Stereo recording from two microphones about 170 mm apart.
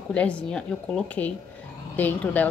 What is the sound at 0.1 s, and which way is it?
A woman's voice, 5° left (ahead or behind).